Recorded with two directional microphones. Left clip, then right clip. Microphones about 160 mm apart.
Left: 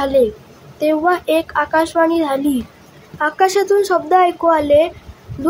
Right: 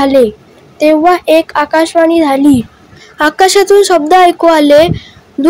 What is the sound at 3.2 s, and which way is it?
Speech, 55° right (ahead or behind).